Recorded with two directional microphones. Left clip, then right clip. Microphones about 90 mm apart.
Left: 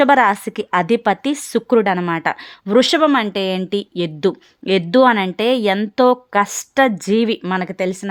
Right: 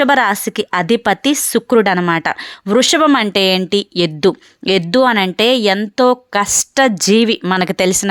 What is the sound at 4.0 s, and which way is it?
Speech, 45° right (ahead or behind).